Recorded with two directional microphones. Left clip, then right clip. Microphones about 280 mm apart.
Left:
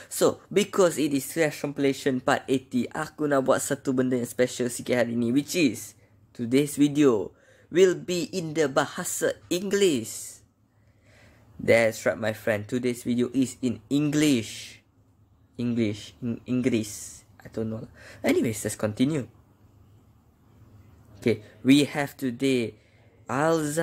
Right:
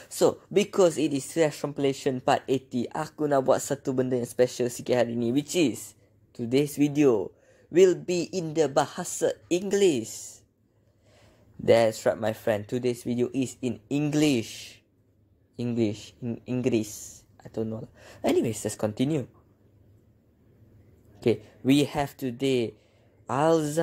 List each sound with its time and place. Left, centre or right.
0.0 s speech: centre
7.0 s a man's voice: centre
10.0 s speech: left
11.1 s speech: centre
15.5 s a man's voice: centre
17.1 s a sound: centre
17.9 s speech: centre
21.5 s speech: centre